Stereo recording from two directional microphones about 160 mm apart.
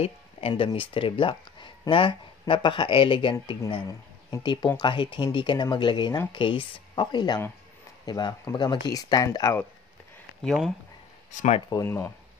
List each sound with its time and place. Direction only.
0.0 s a sound: 35° left (ahead or behind)
0.7 s speech: 35° left (ahead or behind)
10.4 s speech: centre (ahead or behind)
11.3 s speech: 45° left (ahead or behind)
11.7 s speech: 15° left (ahead or behind)